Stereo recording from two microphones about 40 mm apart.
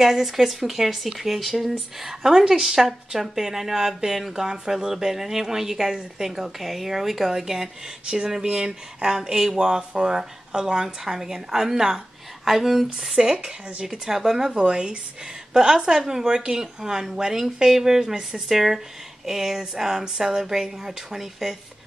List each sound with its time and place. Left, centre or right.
0.0 s speech: centre
8.5 s speech: centre
13.2 s speech: right
13.8 s speech: centre
14.5 s speech: right